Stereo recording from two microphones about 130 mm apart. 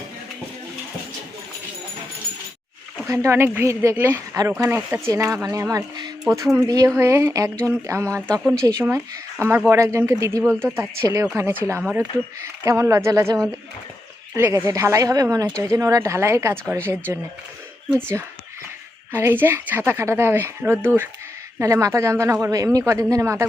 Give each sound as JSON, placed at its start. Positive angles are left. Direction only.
{"t": 3.1, "sound": "a woman's voice", "side_deg": -20}
{"t": 12.6, "sound": "speech", "side_deg": -25}
{"t": 14.3, "sound": "speech", "side_deg": -20}
{"t": 19.1, "sound": "a woman's voice", "side_deg": -15}